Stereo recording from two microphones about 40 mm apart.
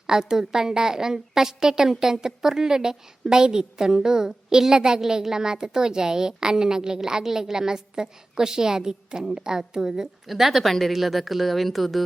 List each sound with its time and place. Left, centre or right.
0.1 s a woman's voice: centre
10.2 s speech: centre